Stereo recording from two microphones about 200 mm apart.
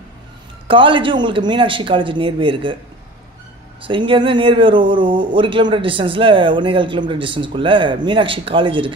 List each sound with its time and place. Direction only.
0.7 s speech: 25° right (ahead or behind)
3.8 s speech: 25° right (ahead or behind)